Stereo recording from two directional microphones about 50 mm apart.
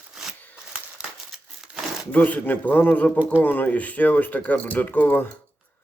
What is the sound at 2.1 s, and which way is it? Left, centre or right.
Speech, left.